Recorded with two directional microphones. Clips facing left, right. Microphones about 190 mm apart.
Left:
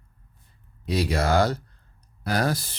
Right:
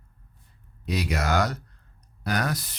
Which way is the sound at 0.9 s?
30° left (ahead or behind).